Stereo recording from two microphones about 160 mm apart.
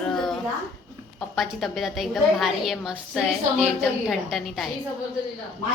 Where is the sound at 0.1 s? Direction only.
5° left (ahead or behind).